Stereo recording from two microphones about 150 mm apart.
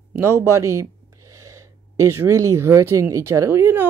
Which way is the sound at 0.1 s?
15° right (ahead or behind).